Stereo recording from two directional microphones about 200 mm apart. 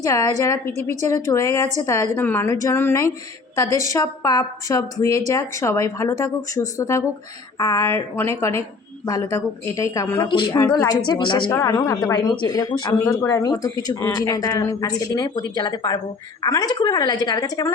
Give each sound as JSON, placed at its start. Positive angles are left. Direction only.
{"t": 0.0, "sound": "speech", "side_deg": 15}